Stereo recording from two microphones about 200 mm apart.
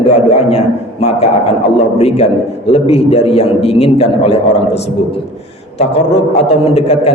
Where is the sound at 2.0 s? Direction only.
30° left (ahead or behind).